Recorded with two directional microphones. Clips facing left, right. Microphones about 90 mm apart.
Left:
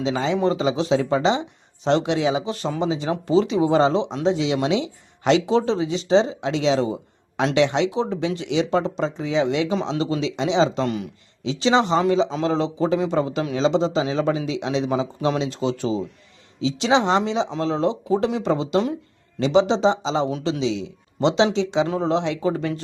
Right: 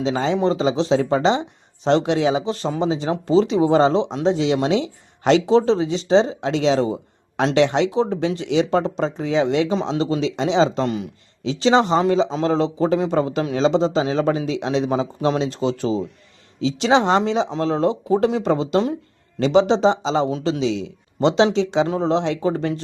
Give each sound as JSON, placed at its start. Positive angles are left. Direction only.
{"t": 0.0, "sound": "speech", "side_deg": -35}
{"t": 21.8, "sound": "speech", "side_deg": -30}